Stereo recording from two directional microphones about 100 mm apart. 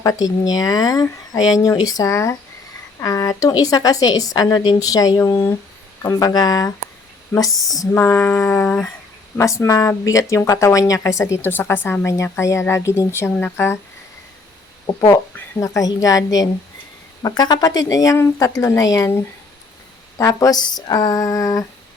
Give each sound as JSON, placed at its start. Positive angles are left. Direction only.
{"t": 0.0, "sound": "speech", "side_deg": 35}
{"t": 5.3, "sound": "speech", "side_deg": 20}
{"t": 6.0, "sound": "speech", "side_deg": 35}
{"t": 7.9, "sound": "a sound", "side_deg": 20}
{"t": 9.4, "sound": "speech", "side_deg": 30}
{"t": 14.8, "sound": "speech", "side_deg": 40}